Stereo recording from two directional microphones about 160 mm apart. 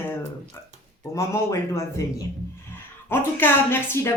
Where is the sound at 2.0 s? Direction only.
20° left (ahead or behind).